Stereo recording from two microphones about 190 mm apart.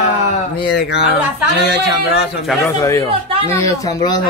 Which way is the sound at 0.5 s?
55° left (ahead or behind).